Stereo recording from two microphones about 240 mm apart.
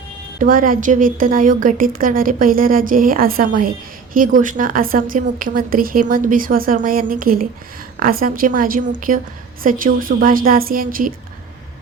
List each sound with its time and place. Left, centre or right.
0.3 s a woman's voice: right